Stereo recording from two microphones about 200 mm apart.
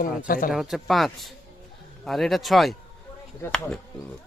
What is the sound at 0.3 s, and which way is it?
Speech, 45° left (ahead or behind).